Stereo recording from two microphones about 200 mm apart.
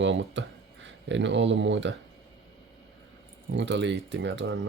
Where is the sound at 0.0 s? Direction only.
70° right (ahead or behind).